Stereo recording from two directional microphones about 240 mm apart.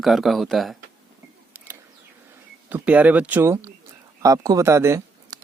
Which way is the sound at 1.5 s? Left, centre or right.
Centre.